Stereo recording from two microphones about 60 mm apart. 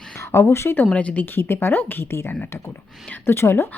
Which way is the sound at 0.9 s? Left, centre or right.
Left.